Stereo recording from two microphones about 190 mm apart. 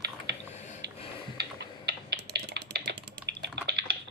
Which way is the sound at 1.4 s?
60° right (ahead or behind).